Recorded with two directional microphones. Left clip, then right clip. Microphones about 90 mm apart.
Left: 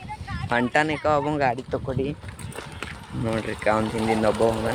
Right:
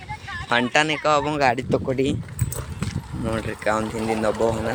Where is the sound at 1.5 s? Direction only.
60° right (ahead or behind).